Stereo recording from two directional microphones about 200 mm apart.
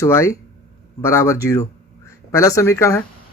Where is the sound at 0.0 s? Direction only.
15° left (ahead or behind).